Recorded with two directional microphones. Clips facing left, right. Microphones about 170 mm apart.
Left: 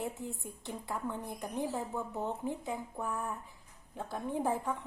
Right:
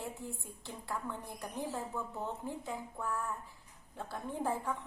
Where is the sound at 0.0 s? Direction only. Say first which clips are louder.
Left 4 dB; 20° left (ahead or behind).